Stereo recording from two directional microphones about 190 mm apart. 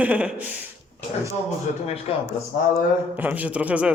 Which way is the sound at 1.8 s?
30° left (ahead or behind).